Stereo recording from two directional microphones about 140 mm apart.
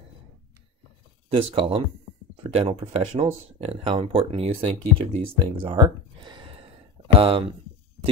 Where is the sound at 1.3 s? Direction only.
40° right (ahead or behind).